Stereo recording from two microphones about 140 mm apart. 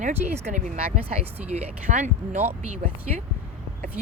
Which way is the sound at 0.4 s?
60° right (ahead or behind).